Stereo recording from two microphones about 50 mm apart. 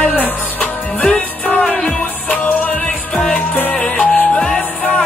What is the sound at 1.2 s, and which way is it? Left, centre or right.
Music, left.